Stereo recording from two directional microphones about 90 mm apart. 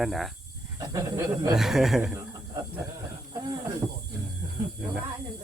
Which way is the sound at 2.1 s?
40° right (ahead or behind).